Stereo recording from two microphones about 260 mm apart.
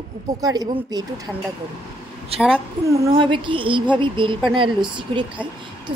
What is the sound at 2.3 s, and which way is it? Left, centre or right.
A woman's voice, right.